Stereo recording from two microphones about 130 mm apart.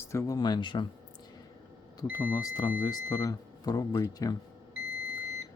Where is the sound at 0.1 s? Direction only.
25° left (ahead or behind).